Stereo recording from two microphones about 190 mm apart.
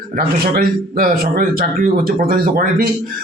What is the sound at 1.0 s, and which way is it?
Speech, 50° right (ahead or behind).